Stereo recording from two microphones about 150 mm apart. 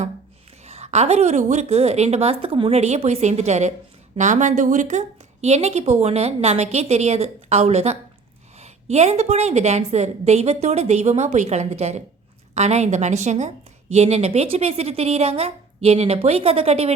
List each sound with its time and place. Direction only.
0.6 s a woman's voice: 45° right (ahead or behind)